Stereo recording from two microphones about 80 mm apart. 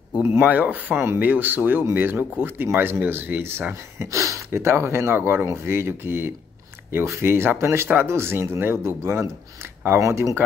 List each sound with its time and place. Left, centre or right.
0.3 s speech: right
4.0 s speech: right